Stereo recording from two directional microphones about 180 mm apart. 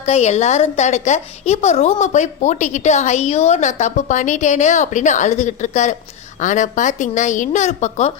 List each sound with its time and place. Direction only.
0.0 s a woman's voice: 40° left (ahead or behind)